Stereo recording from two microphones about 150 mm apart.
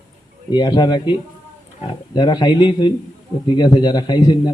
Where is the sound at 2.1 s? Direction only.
30° left (ahead or behind).